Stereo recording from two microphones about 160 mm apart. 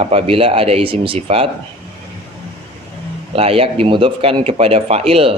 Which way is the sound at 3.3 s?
35° right (ahead or behind).